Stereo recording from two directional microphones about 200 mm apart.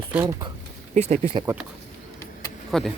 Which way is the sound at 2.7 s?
Centre (ahead or behind).